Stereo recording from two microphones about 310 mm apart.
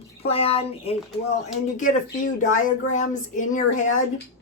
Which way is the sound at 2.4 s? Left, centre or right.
Left.